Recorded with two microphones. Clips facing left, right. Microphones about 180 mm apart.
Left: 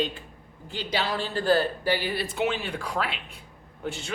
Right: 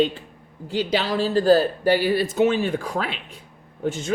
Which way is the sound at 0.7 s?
45° right (ahead or behind).